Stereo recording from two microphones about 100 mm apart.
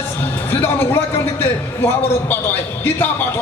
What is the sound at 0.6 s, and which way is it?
A man's voice, 25° left (ahead or behind).